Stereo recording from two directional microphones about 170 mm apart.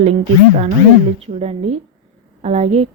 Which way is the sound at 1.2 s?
40° right (ahead or behind).